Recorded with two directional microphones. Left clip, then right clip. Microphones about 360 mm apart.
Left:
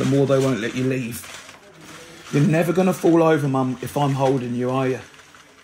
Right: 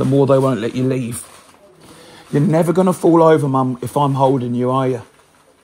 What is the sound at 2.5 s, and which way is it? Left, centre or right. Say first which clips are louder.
Speech: right 5 dB; right.